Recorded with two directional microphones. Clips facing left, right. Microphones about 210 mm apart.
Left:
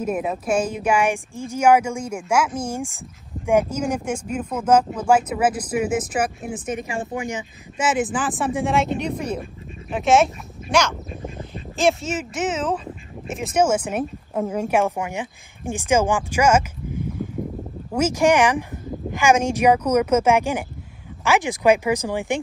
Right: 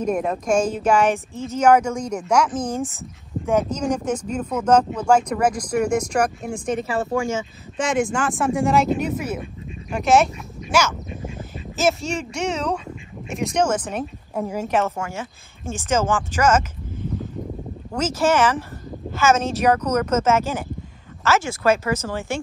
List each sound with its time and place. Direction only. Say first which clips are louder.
0.0 s speech: right 2 dB; 5° left (ahead or behind)
7.8 s speech: right 1 dB; 5° left (ahead or behind)
17.9 s speech: left 2 dB; 10° left (ahead or behind)